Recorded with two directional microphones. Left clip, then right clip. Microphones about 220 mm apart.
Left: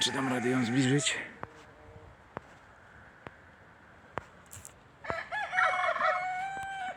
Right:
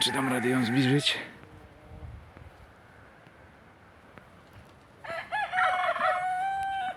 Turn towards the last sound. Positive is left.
turn(degrees=45)  # may be behind; listen again after turning